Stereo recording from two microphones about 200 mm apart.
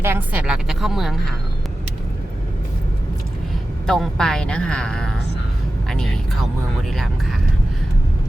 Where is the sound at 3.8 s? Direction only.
Centre (ahead or behind).